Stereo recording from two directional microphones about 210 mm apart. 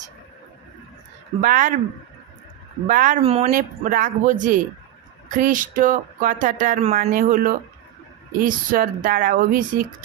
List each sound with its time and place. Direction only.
1.4 s speech: 40° right (ahead or behind)
2.8 s speech: 40° right (ahead or behind)
3.5 s speech: 40° right (ahead or behind)